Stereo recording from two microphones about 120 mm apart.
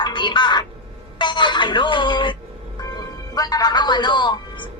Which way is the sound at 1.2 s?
40° left (ahead or behind).